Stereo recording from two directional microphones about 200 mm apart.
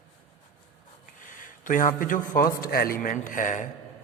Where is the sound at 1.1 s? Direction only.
40° left (ahead or behind).